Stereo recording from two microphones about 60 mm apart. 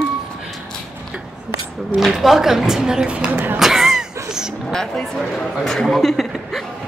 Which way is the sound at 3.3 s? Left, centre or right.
Right.